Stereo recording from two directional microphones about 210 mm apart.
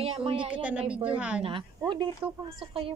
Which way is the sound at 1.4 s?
25° right (ahead or behind).